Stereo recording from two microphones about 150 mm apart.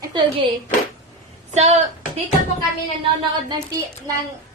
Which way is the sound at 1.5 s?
45° right (ahead or behind).